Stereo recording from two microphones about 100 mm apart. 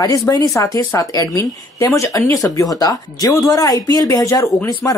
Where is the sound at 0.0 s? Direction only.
35° left (ahead or behind).